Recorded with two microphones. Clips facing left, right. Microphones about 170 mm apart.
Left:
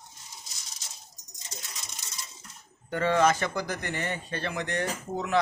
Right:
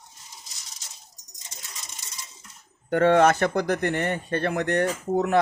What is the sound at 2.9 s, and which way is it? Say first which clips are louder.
Speech: right 6 dB; 60° right (ahead or behind).